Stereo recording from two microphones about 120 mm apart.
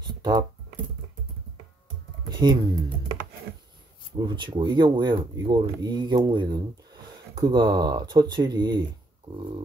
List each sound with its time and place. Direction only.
0.0 s computer keyboard: 40° right (ahead or behind)
2.2 s speech: 35° right (ahead or behind)
4.2 s speech: 40° right (ahead or behind)